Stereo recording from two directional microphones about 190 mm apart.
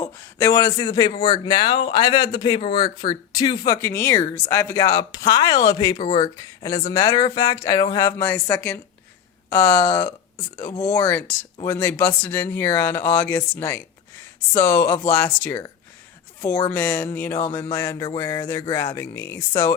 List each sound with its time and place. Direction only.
0.0 s speech: 15° left (ahead or behind)
3.8 s speech: 10° left (ahead or behind)